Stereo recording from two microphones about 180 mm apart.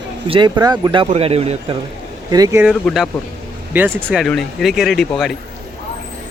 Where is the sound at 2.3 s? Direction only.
20° right (ahead or behind).